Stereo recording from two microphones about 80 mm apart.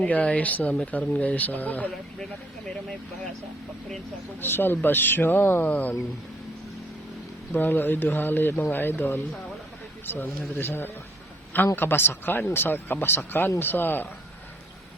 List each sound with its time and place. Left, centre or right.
0.0 s speech: centre
4.4 s speech: left
7.5 s speech: left
10.6 s speech: left